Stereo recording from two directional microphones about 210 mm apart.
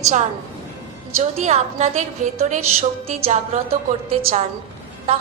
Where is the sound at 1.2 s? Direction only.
30° right (ahead or behind).